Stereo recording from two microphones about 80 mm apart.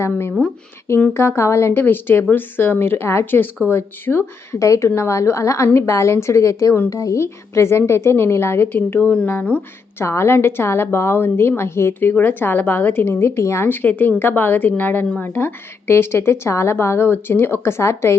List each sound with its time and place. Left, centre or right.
0.4 s speech: centre
1.1 s a woman's voice: left
4.6 s a woman's voice: left; by 9.6 s centre
10.0 s a woman's voice: left
13.7 s a woman's voice: left